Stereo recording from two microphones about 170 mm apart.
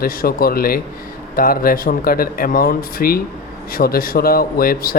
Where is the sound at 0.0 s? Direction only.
60° left (ahead or behind).